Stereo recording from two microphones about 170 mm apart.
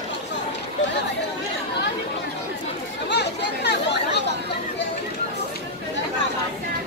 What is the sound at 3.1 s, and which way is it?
Chatter, 85° left.